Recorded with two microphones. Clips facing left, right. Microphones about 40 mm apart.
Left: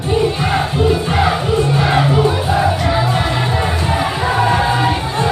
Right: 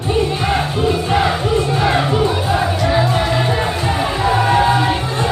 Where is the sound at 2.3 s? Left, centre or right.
Centre.